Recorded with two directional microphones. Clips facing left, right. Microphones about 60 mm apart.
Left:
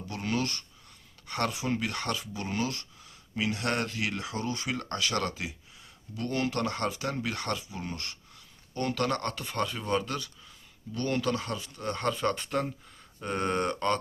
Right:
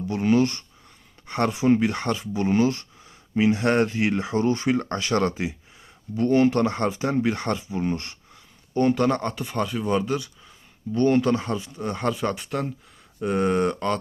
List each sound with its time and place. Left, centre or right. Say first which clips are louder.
0.1 s speech: right 11 dB; right
10.9 s speech: right 10 dB; right; by 14.0 s centre